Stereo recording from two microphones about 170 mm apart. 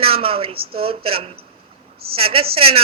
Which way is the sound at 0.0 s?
35° right (ahead or behind).